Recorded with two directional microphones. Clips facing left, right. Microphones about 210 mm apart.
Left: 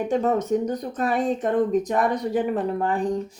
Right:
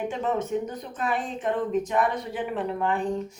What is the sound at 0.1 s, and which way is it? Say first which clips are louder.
Speech: left 6 dB; 40° left (ahead or behind).